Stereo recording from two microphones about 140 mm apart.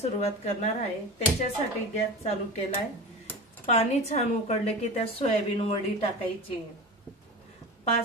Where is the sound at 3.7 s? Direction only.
50° left (ahead or behind).